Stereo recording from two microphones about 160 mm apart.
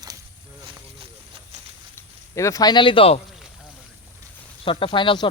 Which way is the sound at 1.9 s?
20° left (ahead or behind).